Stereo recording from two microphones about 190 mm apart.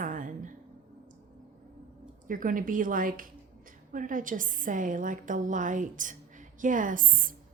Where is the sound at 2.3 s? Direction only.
45° right (ahead or behind).